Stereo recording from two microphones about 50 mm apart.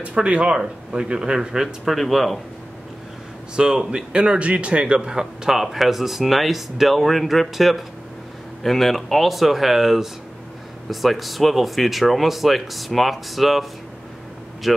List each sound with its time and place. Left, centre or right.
0.0 s speech: right
1.9 s speech: centre
3.5 s speech: centre